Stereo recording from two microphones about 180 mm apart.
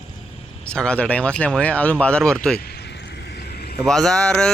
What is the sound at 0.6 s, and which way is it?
Speech, 5° left (ahead or behind).